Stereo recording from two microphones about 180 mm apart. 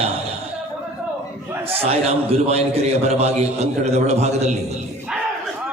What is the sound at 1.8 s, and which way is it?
A man's voice, 35° right (ahead or behind).